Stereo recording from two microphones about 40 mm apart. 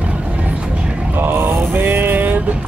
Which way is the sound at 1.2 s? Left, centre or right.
Right.